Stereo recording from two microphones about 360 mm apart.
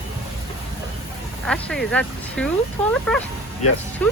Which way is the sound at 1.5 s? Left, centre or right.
Centre.